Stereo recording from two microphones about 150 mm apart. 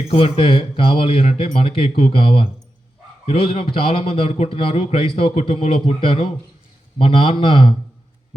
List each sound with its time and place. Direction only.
0.1 s a man's voice: 40° left (ahead or behind)